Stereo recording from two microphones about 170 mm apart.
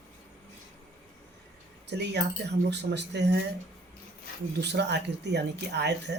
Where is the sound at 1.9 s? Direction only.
85° right.